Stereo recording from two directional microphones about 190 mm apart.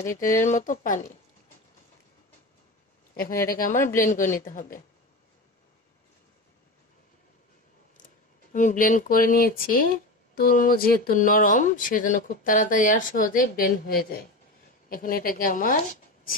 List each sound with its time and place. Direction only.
0.1 s speech: 45° left (ahead or behind)
3.4 s speech: 45° left (ahead or behind)
8.5 s speech: 45° left (ahead or behind)